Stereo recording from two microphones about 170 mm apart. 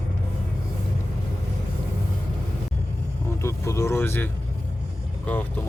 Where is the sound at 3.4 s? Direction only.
15° left (ahead or behind).